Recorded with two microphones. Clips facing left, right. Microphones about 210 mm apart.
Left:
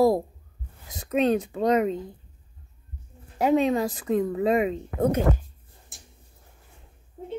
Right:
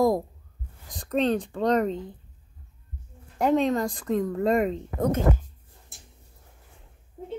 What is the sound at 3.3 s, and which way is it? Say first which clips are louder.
Speech: left 1 dB; 5° left (ahead or behind).